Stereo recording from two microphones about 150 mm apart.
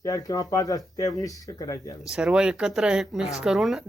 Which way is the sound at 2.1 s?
5° right (ahead or behind).